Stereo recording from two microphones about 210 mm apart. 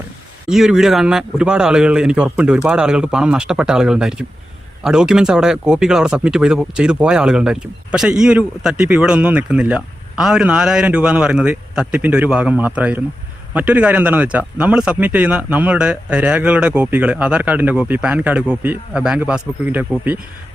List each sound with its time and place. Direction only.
0.4 s speech: 5° right (ahead or behind)